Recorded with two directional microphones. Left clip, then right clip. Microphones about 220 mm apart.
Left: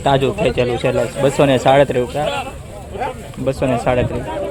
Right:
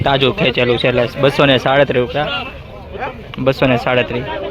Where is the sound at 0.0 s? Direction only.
5° left (ahead or behind).